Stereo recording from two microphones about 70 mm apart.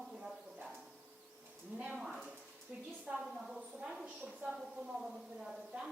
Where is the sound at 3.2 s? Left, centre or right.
Centre.